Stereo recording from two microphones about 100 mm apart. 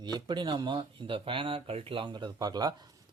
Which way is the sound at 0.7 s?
60° right (ahead or behind).